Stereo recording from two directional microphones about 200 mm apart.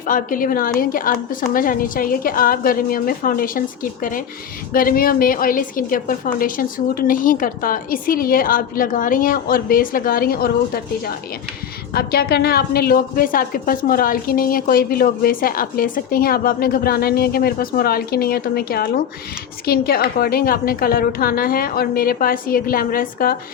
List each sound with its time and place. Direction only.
0.0 s a woman's voice: 45° left (ahead or behind)
4.7 s a woman's voice: 45° left (ahead or behind)